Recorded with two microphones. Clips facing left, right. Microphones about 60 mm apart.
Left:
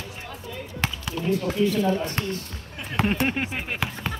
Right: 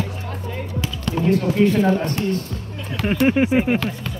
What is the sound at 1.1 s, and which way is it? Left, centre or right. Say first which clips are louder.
Speech: right 8 dB; right.